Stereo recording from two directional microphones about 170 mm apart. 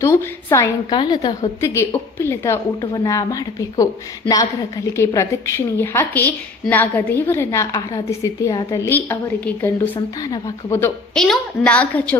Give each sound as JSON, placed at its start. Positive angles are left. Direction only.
{"t": 0.0, "sound": "a woman's voice", "side_deg": 15}
{"t": 4.9, "sound": "a woman's voice", "side_deg": 15}
{"t": 11.1, "sound": "a woman's voice", "side_deg": 5}